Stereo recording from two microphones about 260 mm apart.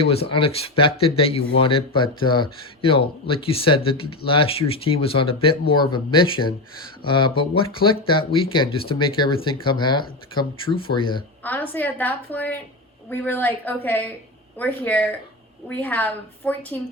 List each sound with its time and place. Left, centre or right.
0.0 s a woman's voice: left
11.4 s a woman's voice: centre